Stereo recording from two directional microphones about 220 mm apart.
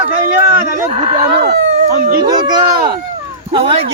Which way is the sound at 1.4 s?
40° right (ahead or behind).